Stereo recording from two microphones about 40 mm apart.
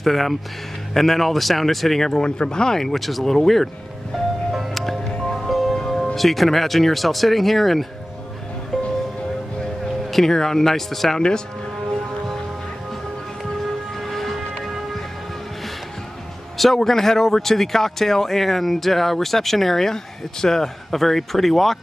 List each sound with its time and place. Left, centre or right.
0.0 s speech: centre
4.7 s music: centre
6.1 s speech: centre
8.7 s music: centre
10.1 s speech: centre
11.1 s speech: centre
14.0 s siren: centre
16.5 s speech: centre